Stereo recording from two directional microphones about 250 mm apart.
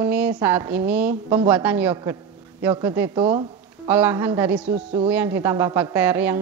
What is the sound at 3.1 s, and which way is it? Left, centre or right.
Speech, right.